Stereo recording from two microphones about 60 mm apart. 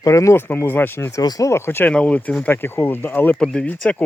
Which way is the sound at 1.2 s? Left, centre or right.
Left.